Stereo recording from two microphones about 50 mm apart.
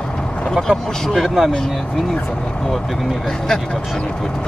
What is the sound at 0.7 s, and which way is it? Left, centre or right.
Speech, centre.